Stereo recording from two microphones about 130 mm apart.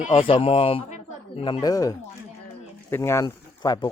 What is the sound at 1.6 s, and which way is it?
Speech, 30° left (ahead or behind).